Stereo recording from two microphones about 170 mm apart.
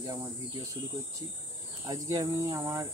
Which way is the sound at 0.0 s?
20° right (ahead or behind).